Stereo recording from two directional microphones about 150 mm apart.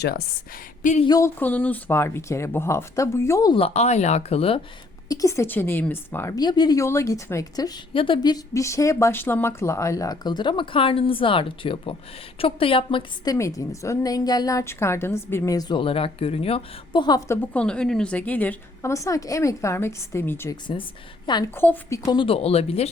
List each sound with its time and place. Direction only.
1.0 s a woman's voice: 25° left (ahead or behind)
1.4 s speech: 10° left (ahead or behind)
3.5 s speech: 45° left (ahead or behind)
5.0 s a woman's voice: 20° left (ahead or behind)
13.3 s a woman's voice: 20° left (ahead or behind)
21.2 s a woman's voice: 30° left (ahead or behind)
21.5 s speech: 15° left (ahead or behind); by 22.9 s 40° left (ahead or behind)